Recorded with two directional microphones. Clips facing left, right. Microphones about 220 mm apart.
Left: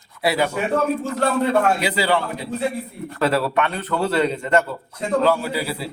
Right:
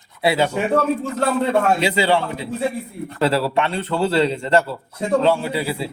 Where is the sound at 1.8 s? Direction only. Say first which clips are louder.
Right 3 dB; 25° right (ahead or behind).